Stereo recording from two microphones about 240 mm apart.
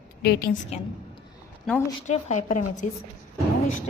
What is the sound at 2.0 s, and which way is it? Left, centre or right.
Speech, left.